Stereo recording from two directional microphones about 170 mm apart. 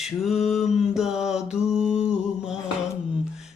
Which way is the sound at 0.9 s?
Centre (ahead or behind).